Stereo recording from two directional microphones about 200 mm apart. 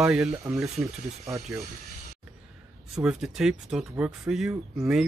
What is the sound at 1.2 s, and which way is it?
Speech, 15° right (ahead or behind).